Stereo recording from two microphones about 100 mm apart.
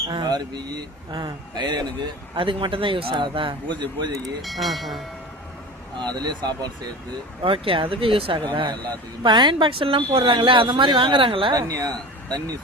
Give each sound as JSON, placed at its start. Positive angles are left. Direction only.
{"t": 0.1, "sound": "a man's voice", "side_deg": -45}
{"t": 2.3, "sound": "a man's voice", "side_deg": -60}
{"t": 4.4, "sound": "speech", "side_deg": 0}
{"t": 6.0, "sound": "a man's voice", "side_deg": -45}
{"t": 7.4, "sound": "a man's voice", "side_deg": -65}
{"t": 9.2, "sound": "a man's voice", "side_deg": -50}
{"t": 11.5, "sound": "speech", "side_deg": -40}